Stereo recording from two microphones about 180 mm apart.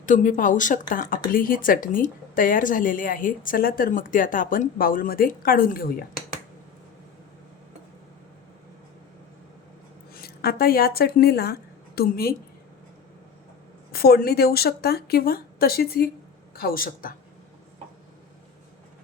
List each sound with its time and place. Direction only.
0.0 s speech: 45° left (ahead or behind)
10.2 s a woman's voice: 55° left (ahead or behind)
13.9 s a woman's voice: 60° left (ahead or behind)